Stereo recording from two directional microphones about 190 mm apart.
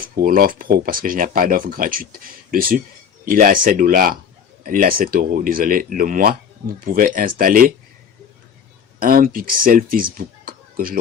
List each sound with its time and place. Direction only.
0.0 s speech: 50° right (ahead or behind)
9.0 s speech: 50° right (ahead or behind)